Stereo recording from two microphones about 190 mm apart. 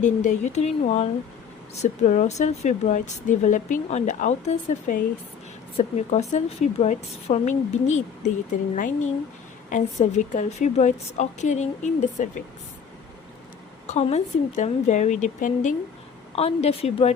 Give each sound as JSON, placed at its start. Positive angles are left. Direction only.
{"t": 0.0, "sound": "speech", "side_deg": 40}
{"t": 13.8, "sound": "speech", "side_deg": 35}